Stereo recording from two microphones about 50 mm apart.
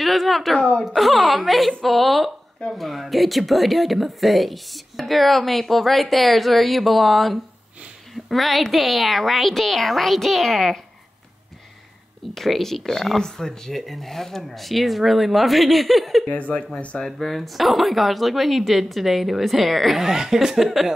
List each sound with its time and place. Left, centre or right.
0.0 s a woman's voice: centre
0.6 s speech: centre
0.8 s speech: centre
12.4 s speech: centre
16.3 s speech: left
17.0 s speech: centre